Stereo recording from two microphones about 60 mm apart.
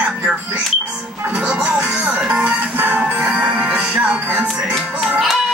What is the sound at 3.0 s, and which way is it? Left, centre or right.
Music, centre.